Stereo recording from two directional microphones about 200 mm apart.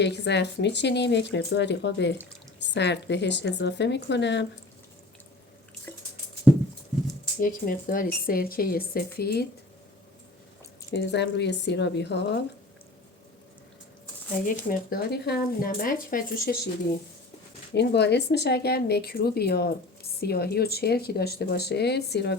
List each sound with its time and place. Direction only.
0.0 s speech: 60° left (ahead or behind)
5.9 s music: 10° left (ahead or behind)
7.3 s speech: 45° left (ahead or behind)
10.9 s speech: 60° left (ahead or behind)
14.4 s speech: 45° left (ahead or behind)
17.7 s speech: 60° left (ahead or behind)